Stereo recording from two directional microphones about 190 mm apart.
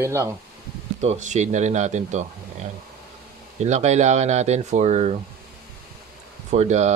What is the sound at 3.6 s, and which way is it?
A man's voice, 35° right (ahead or behind).